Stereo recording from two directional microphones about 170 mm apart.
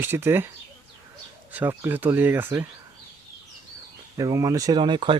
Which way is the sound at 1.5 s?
10° right (ahead or behind).